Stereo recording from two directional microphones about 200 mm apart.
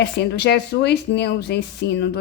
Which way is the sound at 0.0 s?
60° left (ahead or behind).